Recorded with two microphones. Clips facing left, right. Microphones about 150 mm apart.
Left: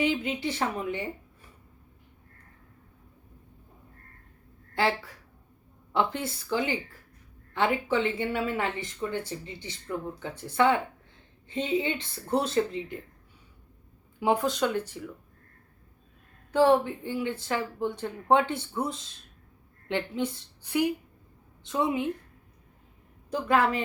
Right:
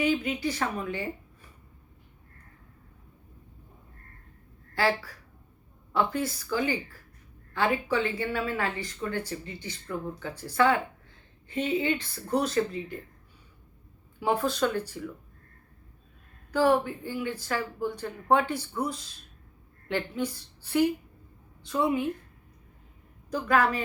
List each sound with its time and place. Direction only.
0.0 s speech: 25° left (ahead or behind)
4.7 s speech: 20° left (ahead or behind)
14.2 s speech: 20° left (ahead or behind)
16.5 s speech: 25° left (ahead or behind)
23.3 s speech: 25° left (ahead or behind)